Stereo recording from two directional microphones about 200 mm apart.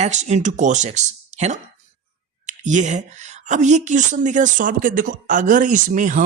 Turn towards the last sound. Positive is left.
turn(degrees=-40)  # may be behind; listen again after turning